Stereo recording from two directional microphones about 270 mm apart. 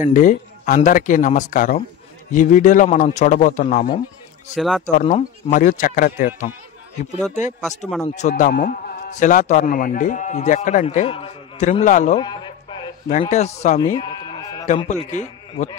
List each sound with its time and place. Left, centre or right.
0.0 s a man's voice: left
4.6 s speech: centre
4.8 s a man's voice: left
8.2 s a man's voice: left
12.2 s a sound: centre
13.1 s speech: left
14.7 s a man's voice: left